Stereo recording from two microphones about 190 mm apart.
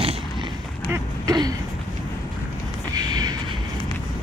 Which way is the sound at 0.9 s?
20° right (ahead or behind).